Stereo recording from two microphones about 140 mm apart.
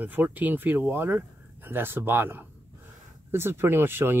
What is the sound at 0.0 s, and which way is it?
Speech, 15° right (ahead or behind).